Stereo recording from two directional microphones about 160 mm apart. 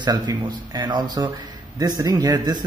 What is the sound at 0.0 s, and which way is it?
Speech, 25° right (ahead or behind).